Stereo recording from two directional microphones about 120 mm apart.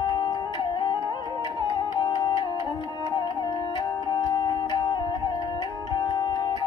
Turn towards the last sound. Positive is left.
turn(degrees=40)  # may be behind; listen again after turning